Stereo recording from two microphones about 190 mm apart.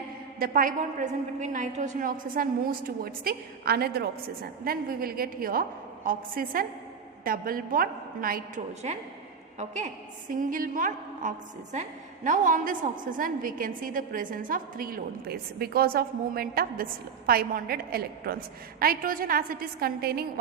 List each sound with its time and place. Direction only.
0.3 s a woman's voice: 50° right (ahead or behind)
8.8 s a woman's voice: 35° right (ahead or behind); by 20.4 s 55° right (ahead or behind)